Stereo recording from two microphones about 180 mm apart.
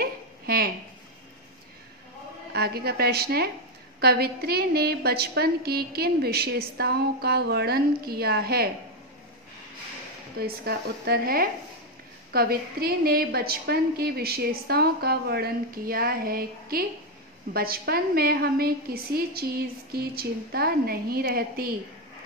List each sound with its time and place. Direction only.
0.0 s a sound: 55° right (ahead or behind)
2.5 s a woman's voice: 60° right (ahead or behind)
10.4 s a woman's voice: 60° right (ahead or behind)